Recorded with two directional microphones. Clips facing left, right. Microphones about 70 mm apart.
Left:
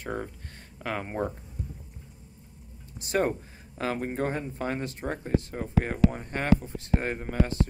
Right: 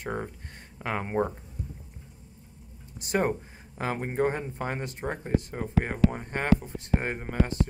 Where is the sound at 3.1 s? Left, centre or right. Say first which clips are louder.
Even; right.